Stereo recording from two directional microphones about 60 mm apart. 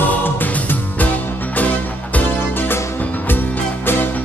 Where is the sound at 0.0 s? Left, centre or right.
Left.